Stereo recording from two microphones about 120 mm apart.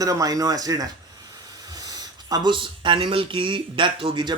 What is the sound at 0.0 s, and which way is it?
Speech, 30° right (ahead or behind).